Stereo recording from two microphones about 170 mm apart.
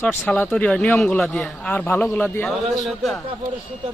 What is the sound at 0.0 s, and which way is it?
A man's voice, 10° left (ahead or behind).